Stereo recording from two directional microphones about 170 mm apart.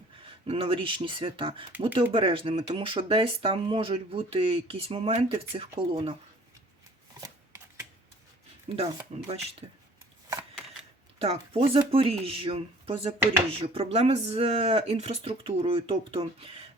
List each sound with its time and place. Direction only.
0.4 s speech: 35° right (ahead or behind)
7.2 s shuffling cards: 15° right (ahead or behind)
8.7 s speech: 35° right (ahead or behind)
11.2 s speech: 35° right (ahead or behind)